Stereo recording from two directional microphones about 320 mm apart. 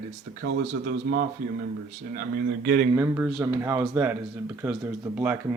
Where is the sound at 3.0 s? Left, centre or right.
Centre.